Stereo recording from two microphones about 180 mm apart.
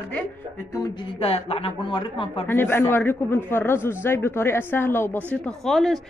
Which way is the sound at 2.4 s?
10° left (ahead or behind).